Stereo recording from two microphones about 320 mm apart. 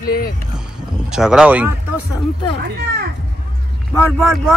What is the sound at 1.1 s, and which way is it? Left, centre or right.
Speech, centre.